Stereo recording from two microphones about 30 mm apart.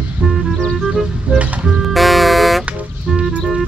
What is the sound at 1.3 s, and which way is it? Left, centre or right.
Music, right.